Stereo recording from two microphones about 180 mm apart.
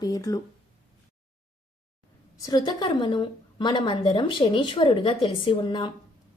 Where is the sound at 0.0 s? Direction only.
20° left (ahead or behind).